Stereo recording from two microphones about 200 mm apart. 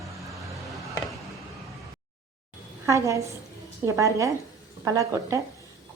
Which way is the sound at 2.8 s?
15° right (ahead or behind).